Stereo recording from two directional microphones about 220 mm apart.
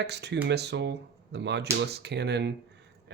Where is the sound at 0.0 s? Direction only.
50° right (ahead or behind).